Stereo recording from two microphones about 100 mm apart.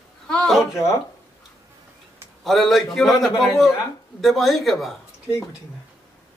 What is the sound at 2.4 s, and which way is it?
Speech, centre (ahead or behind).